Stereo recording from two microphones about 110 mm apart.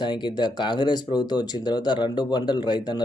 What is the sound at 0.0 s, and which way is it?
A man's voice, 45° left (ahead or behind).